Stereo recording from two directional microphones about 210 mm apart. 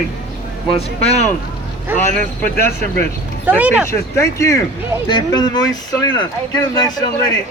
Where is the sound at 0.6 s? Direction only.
30° left (ahead or behind).